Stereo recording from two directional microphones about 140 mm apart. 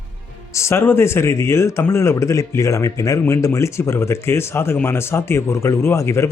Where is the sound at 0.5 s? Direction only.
20° left (ahead or behind).